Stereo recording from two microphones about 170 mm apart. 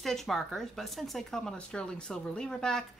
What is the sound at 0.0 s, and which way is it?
Speech, centre (ahead or behind).